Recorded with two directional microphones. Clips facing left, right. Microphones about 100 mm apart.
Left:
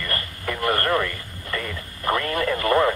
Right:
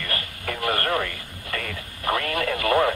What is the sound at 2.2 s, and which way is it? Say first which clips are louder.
Speech: left 2 dB; 40° left (ahead or behind).